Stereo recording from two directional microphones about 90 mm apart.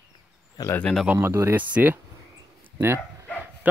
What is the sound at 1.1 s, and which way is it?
Speech, 30° right (ahead or behind).